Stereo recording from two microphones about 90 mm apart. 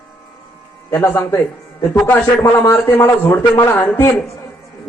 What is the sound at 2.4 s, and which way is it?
A man's voice, 30° left (ahead or behind).